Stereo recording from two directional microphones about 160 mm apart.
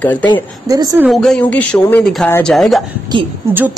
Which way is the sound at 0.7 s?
20° right (ahead or behind).